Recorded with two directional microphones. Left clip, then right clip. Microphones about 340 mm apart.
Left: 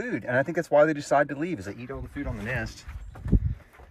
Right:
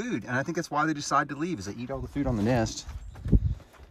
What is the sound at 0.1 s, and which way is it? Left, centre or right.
Speech, right.